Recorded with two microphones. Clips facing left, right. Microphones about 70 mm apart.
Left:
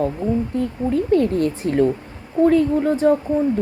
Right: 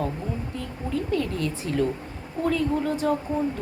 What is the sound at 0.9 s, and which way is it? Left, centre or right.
A woman's voice, left.